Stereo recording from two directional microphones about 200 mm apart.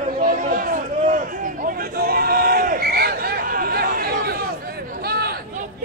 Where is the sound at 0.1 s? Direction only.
45° right (ahead or behind).